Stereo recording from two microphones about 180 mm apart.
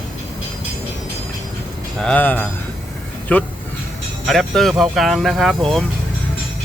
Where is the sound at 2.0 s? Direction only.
5° left (ahead or behind).